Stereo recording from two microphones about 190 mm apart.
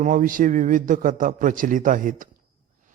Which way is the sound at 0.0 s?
45° right (ahead or behind).